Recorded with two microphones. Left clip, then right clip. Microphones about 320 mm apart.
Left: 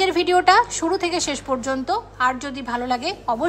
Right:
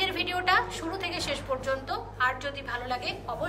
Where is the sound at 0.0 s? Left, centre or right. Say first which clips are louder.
Left 11 dB; centre.